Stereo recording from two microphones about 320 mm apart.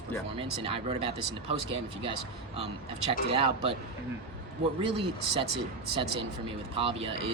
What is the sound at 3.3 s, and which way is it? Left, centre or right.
Speech, centre.